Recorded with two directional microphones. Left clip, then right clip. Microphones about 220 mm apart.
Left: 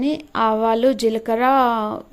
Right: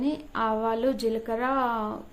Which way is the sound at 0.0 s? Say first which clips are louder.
Left 8 dB; 35° left (ahead or behind).